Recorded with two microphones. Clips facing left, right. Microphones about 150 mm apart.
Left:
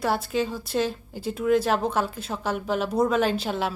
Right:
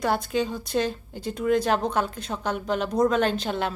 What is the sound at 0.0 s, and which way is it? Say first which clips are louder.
A woman's voice: even; centre (ahead or behind).